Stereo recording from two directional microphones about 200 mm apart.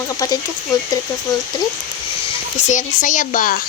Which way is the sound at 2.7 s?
40° left (ahead or behind).